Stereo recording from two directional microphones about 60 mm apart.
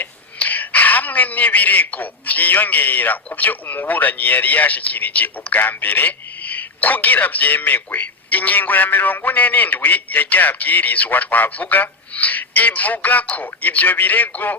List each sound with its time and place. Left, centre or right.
0.0 s speech: left